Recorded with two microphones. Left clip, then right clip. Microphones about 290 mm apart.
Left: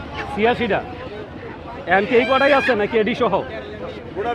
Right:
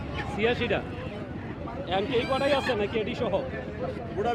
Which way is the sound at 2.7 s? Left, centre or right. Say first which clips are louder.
Left 10 dB; left.